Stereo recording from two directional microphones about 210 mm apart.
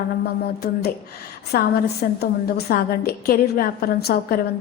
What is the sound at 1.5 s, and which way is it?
A woman's voice, 50° left (ahead or behind).